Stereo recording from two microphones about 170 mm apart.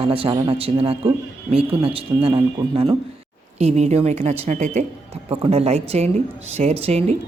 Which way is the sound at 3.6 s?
40° right (ahead or behind).